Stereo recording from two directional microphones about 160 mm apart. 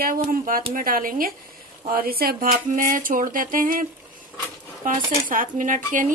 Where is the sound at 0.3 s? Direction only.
60° right (ahead or behind).